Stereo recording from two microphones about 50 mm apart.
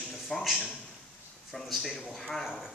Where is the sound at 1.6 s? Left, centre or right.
Centre.